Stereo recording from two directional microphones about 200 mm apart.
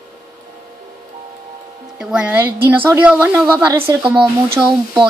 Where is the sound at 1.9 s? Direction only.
5° right (ahead or behind).